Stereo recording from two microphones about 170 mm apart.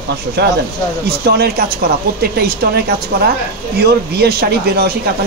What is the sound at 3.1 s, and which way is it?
Speech, 70° right (ahead or behind).